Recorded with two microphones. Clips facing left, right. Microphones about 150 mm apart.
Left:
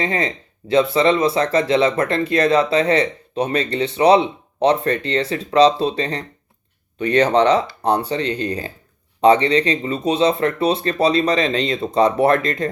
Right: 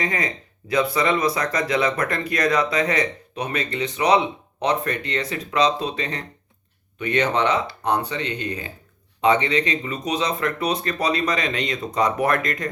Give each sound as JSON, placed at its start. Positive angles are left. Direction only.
{"t": 0.0, "sound": "speech", "side_deg": 30}